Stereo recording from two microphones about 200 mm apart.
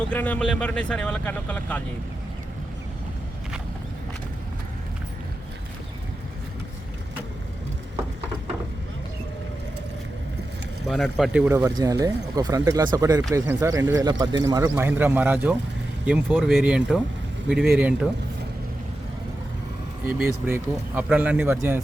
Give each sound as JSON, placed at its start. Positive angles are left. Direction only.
{"t": 0.1, "sound": "speech", "side_deg": 5}
{"t": 10.8, "sound": "speech", "side_deg": 0}
{"t": 11.6, "sound": "speech", "side_deg": -15}
{"t": 20.1, "sound": "speech", "side_deg": -5}